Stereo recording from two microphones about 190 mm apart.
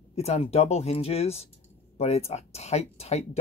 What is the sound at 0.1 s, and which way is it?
Speech, 35° left (ahead or behind).